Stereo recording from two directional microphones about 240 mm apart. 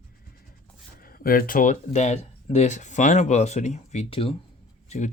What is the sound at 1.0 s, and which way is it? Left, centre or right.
Speech, left.